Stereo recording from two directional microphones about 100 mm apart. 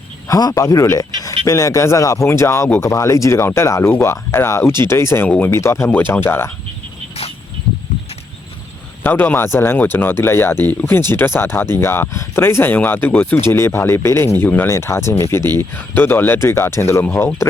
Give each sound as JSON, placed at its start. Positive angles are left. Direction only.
{"t": 0.3, "sound": "speech", "side_deg": 40}
{"t": 9.0, "sound": "speech", "side_deg": 20}